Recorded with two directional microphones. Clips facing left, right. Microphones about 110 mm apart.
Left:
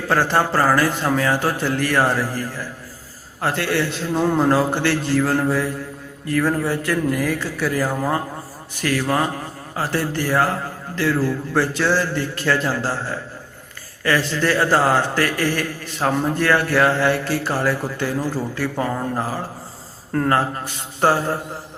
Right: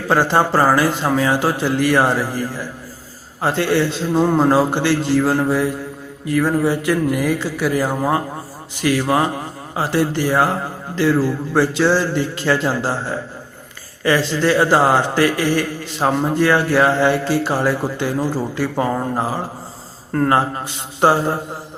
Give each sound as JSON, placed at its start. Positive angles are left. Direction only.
{"t": 0.1, "sound": "a man's voice", "side_deg": -20}